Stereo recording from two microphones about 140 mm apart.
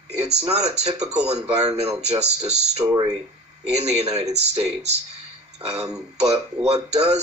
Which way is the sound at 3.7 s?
50° right (ahead or behind).